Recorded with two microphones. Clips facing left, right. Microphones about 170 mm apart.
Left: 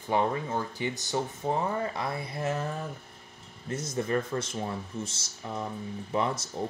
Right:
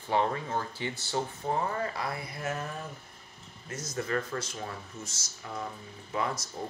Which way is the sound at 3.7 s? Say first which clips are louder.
Left 3 dB; 25° left (ahead or behind).